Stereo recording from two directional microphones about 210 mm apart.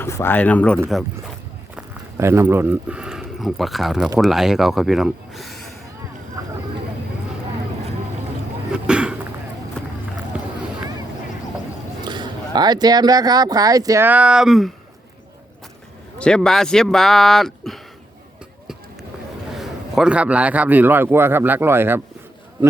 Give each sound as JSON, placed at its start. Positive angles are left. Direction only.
{"t": 0.0, "sound": "speech", "side_deg": 10}
{"t": 1.7, "sound": "speech", "side_deg": -10}
{"t": 8.7, "sound": "a sound", "side_deg": -5}
{"t": 10.3, "sound": "a sound", "side_deg": -5}
{"t": 12.0, "sound": "speech", "side_deg": -20}
{"t": 16.1, "sound": "speech", "side_deg": 5}
{"t": 19.5, "sound": "a man's voice", "side_deg": -5}